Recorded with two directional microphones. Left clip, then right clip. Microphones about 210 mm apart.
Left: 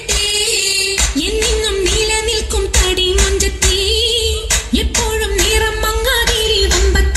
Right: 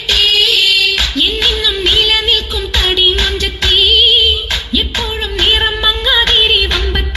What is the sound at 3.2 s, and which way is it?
Music, 35° left (ahead or behind).